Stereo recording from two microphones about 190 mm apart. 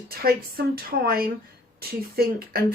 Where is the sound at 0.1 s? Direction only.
55° right (ahead or behind).